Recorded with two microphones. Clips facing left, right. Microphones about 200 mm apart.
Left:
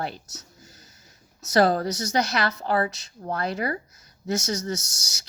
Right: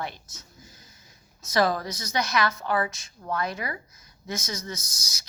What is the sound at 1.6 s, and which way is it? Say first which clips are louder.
A woman's voice: left 4 dB; 35° left (ahead or behind).